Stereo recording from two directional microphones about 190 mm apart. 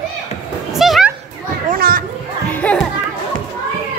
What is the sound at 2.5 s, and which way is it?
Music, 5° left (ahead or behind).